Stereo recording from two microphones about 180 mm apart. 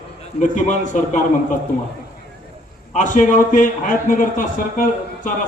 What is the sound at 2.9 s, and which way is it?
A man's voice, 45° left (ahead or behind).